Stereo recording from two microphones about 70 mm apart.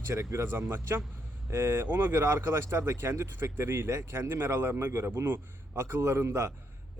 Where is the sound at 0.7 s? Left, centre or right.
Right.